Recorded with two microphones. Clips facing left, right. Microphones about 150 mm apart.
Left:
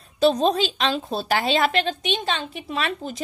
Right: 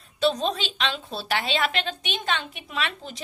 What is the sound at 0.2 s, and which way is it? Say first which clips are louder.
A woman's voice: left 6 dB; 40° left (ahead or behind).